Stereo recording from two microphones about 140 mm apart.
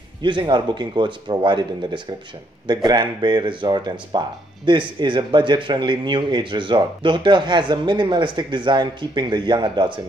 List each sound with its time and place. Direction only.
0.2 s speech: 35° right (ahead or behind)